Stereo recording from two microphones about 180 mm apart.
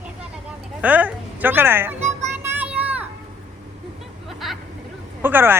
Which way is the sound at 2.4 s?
10° right (ahead or behind).